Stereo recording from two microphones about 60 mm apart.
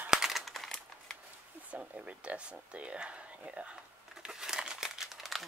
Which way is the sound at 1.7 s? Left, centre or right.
Right.